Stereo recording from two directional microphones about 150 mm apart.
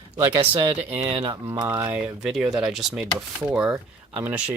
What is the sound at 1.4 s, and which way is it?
Speech, 20° right (ahead or behind).